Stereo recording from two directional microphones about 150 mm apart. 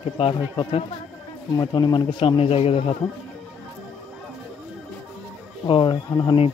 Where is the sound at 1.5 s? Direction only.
25° left (ahead or behind).